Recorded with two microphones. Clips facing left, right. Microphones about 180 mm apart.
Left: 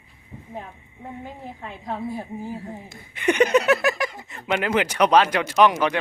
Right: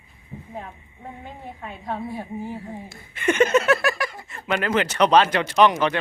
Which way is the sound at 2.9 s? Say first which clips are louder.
Left 1 dB; 15° left (ahead or behind).